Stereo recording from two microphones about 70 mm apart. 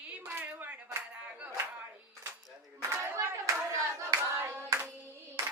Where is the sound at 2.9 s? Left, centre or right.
Right.